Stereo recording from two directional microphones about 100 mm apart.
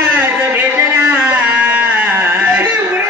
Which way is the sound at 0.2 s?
20° right (ahead or behind).